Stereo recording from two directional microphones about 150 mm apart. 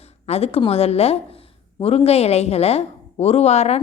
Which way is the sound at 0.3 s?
45° left (ahead or behind).